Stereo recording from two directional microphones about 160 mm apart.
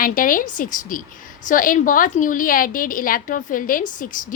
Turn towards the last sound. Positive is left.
turn(degrees=60)  # may be behind; listen again after turning